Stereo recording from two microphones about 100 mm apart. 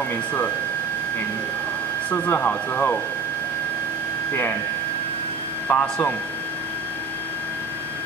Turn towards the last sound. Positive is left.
turn(degrees=15)  # may be behind; listen again after turning